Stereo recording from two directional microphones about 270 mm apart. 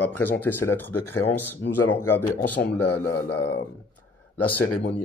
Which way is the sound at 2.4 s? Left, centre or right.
Left.